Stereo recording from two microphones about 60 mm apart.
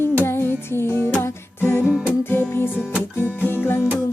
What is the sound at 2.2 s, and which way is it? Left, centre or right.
Music, left.